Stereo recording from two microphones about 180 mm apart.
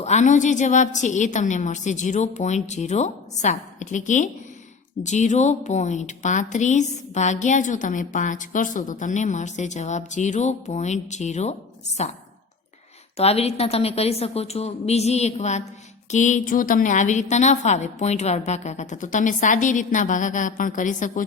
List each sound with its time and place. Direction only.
0.0 s a woman's voice: 40° left (ahead or behind)
13.1 s a woman's voice: 35° left (ahead or behind)